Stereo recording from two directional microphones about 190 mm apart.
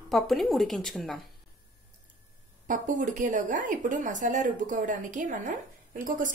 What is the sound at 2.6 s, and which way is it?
Speech, 45° right (ahead or behind).